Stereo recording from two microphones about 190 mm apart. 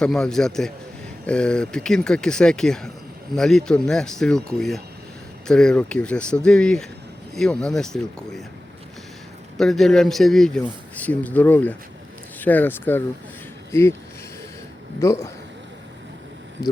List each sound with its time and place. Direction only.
0.0 s speech: 5° left (ahead or behind)
9.6 s speech: centre (ahead or behind)
15.0 s speech: 15° left (ahead or behind)